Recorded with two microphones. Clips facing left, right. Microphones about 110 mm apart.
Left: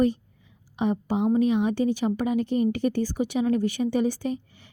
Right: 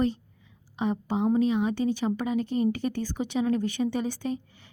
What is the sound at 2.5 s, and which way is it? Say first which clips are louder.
Speech: left 2 dB; 30° right (ahead or behind).